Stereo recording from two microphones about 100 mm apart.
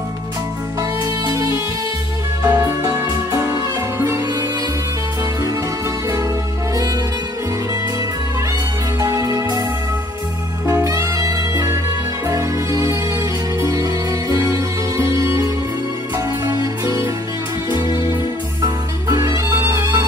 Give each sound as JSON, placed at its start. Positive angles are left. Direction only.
{"t": 1.2, "sound": "music", "side_deg": -35}
{"t": 2.4, "sound": "music", "side_deg": -20}
{"t": 9.0, "sound": "music", "side_deg": -35}
{"t": 10.7, "sound": "music", "side_deg": -30}
{"t": 19.0, "sound": "music", "side_deg": -35}
{"t": 19.5, "sound": "music", "side_deg": -25}